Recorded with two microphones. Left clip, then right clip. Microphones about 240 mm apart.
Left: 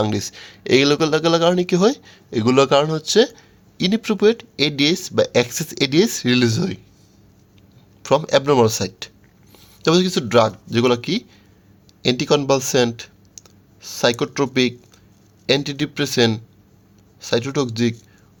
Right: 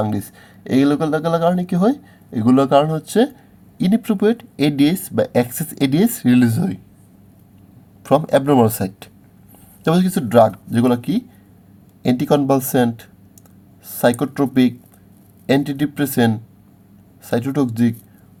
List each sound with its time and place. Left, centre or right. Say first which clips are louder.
0.1 s speech: left 2 dB; left
8.0 s speech: right 1 dB; centre